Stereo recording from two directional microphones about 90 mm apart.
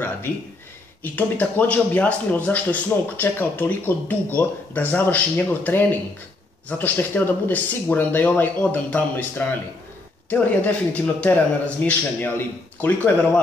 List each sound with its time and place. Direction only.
1.1 s a man's voice: 20° left (ahead or behind)